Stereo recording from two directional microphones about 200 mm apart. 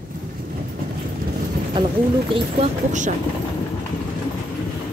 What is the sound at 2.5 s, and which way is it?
Speech, 35° right (ahead or behind).